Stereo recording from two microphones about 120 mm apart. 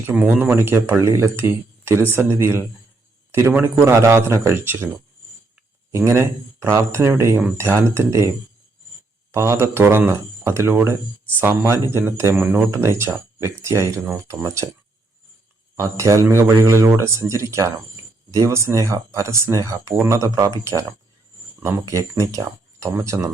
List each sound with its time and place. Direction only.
0.0 s speech: 15° right (ahead or behind)
6.1 s speech: 20° right (ahead or behind)
9.3 s speech: 20° right (ahead or behind)
15.7 s speech: 25° right (ahead or behind)
21.6 s speech: 25° right (ahead or behind)